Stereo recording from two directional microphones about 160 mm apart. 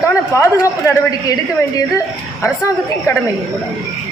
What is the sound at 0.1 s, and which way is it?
A woman's voice, 20° left (ahead or behind).